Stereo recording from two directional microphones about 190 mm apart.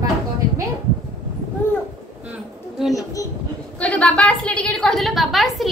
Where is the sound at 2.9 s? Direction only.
15° left (ahead or behind).